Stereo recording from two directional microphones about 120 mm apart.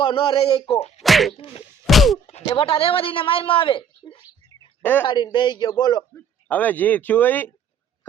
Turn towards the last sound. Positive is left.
turn(degrees=15)  # may be behind; listen again after turning